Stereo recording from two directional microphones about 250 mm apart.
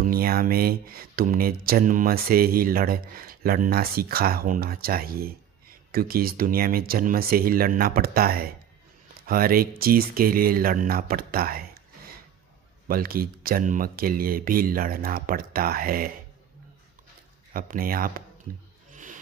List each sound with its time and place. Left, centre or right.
0.0 s speech: right
12.8 s speech: right
17.5 s speech: right